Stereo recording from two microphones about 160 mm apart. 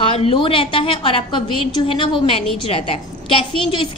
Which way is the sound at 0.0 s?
35° left (ahead or behind).